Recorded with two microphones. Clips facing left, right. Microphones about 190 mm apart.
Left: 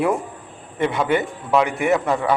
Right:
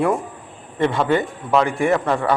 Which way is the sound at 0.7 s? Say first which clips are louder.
Right 1 dB; 15° left (ahead or behind).